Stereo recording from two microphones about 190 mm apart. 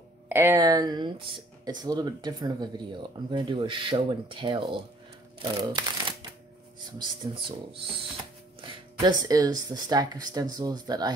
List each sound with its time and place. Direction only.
0.3 s speech: 10° right (ahead or behind)
8.5 s speech: 20° right (ahead or behind)